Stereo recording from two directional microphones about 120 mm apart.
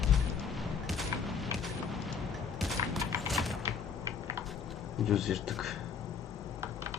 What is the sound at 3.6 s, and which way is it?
Typing, 25° right (ahead or behind).